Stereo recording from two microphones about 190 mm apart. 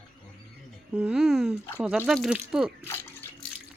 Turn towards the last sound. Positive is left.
turn(degrees=10)  # may be behind; listen again after turning